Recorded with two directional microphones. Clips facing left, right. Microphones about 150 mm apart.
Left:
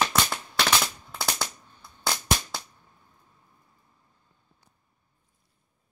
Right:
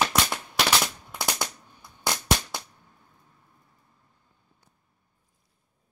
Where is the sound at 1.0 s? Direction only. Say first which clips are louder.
Right 1 dB; 15° right (ahead or behind).